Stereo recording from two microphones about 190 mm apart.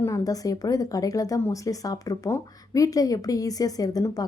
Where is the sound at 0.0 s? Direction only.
15° left (ahead or behind).